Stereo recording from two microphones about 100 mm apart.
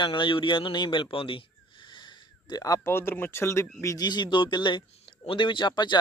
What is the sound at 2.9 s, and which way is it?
Speech, 25° left (ahead or behind).